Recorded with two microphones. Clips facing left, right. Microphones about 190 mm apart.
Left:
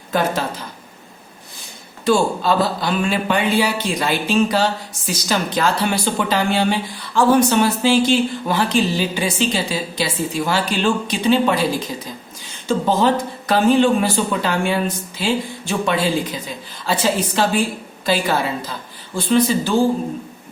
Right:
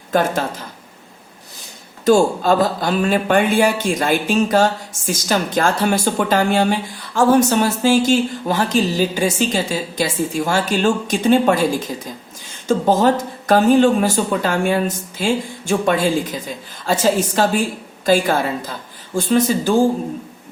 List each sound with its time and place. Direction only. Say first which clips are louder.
0.1 s speech: right 2 dB; 50° right (ahead or behind)
2.0 s speech: right 3 dB; 45° right (ahead or behind)